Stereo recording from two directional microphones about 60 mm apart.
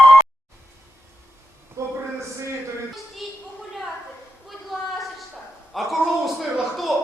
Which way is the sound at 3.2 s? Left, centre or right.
Centre.